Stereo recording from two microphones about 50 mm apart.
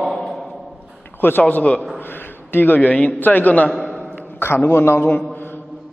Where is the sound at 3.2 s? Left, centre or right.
Left.